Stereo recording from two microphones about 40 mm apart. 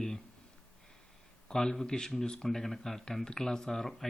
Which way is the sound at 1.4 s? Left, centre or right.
Centre.